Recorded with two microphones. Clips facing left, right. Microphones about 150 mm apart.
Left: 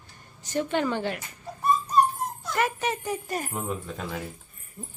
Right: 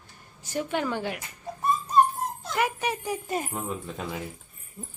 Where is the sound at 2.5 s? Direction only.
10° right (ahead or behind).